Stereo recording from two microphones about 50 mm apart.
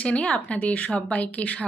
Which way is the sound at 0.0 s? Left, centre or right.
Left.